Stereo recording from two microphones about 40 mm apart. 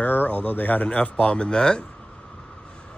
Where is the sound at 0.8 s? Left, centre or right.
Left.